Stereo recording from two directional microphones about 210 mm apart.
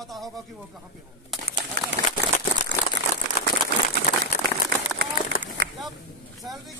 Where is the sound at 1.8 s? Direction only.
50° right (ahead or behind).